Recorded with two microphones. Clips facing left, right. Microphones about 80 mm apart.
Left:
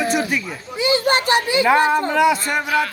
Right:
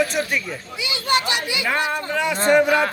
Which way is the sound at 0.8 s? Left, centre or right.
Left.